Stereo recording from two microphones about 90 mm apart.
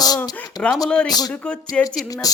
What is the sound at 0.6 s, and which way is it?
A capella, 15° left (ahead or behind).